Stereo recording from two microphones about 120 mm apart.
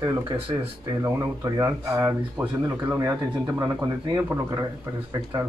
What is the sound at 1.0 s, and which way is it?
Speech, 25° right (ahead or behind).